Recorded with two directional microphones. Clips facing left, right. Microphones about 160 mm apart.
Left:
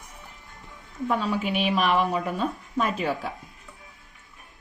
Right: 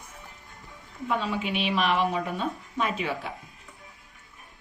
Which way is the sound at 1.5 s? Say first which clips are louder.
Left 2 dB; 45° left (ahead or behind).